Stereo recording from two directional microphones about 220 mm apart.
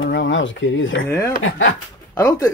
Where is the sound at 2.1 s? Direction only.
15° left (ahead or behind).